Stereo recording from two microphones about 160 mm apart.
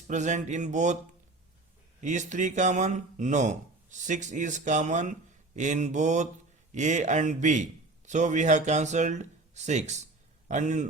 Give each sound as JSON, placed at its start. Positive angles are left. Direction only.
{"t": 0.1, "sound": "speech", "side_deg": -50}
{"t": 2.0, "sound": "speech", "side_deg": -50}